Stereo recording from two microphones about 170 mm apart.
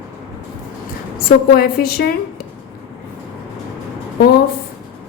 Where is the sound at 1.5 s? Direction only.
60° left (ahead or behind).